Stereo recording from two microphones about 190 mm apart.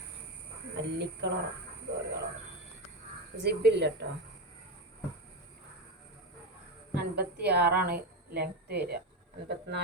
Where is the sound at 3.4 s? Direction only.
60° right (ahead or behind).